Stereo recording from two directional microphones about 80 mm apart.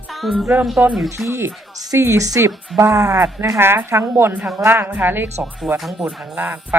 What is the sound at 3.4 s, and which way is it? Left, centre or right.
A woman's voice, right.